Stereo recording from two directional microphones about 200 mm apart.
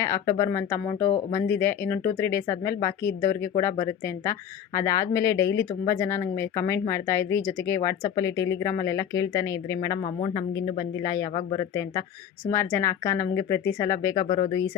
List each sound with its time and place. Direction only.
0.0 s speech: 15° left (ahead or behind)